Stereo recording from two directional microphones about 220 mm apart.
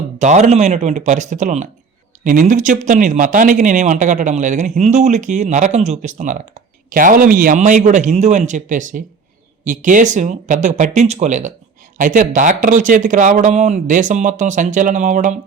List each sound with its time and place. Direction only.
0.2 s speech: 35° right (ahead or behind)